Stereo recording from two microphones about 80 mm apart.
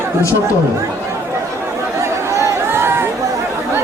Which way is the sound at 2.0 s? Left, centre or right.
Right.